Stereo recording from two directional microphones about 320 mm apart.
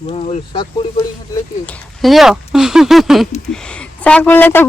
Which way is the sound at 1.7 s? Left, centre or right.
Centre.